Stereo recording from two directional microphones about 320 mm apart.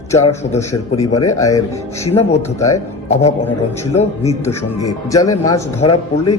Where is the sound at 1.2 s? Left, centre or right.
Centre.